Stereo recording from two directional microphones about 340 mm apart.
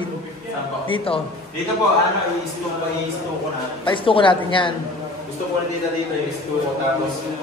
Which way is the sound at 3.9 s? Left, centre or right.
Centre.